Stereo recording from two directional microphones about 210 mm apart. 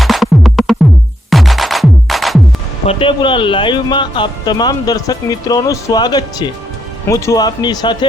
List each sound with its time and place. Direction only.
0.0 s music: centre (ahead or behind)
2.8 s speech: 25° left (ahead or behind)